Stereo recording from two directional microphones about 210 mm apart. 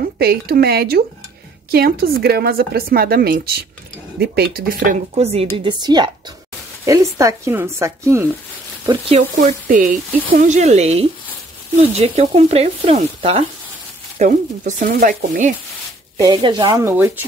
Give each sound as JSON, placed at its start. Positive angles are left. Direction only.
{"t": 0.2, "sound": "speech", "side_deg": -50}
{"t": 9.7, "sound": "speech", "side_deg": -40}
{"t": 16.2, "sound": "speech", "side_deg": -20}